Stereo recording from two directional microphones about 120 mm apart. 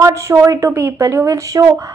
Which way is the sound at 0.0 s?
25° right (ahead or behind).